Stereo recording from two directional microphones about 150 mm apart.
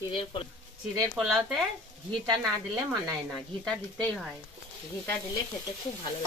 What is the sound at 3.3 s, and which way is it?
Speech, 5° left (ahead or behind).